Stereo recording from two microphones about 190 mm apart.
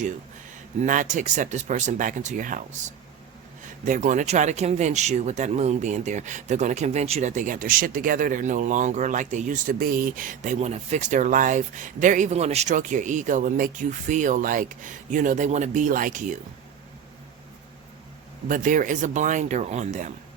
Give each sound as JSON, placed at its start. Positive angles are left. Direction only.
{"t": 0.8, "sound": "speech", "side_deg": -40}
{"t": 3.8, "sound": "speech", "side_deg": -40}
{"t": 18.4, "sound": "speech", "side_deg": -45}